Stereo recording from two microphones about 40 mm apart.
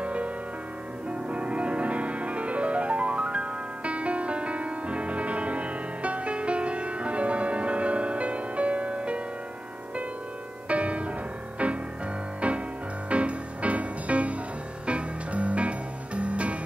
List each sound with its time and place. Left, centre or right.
0.0 s music: right
1.3 s music: right
10.7 s music: right